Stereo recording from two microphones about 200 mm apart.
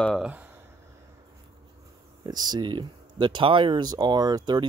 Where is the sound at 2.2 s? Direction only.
20° right (ahead or behind).